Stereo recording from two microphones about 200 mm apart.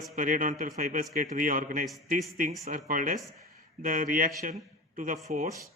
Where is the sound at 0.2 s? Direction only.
40° right (ahead or behind).